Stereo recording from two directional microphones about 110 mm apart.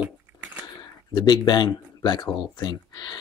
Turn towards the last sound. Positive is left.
turn(degrees=40)  # may be behind; listen again after turning